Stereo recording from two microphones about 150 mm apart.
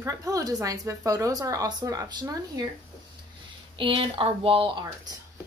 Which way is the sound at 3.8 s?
35° right (ahead or behind).